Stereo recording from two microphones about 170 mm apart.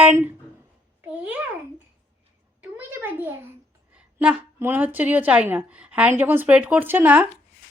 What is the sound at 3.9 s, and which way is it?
A woman's voice, 10° right (ahead or behind).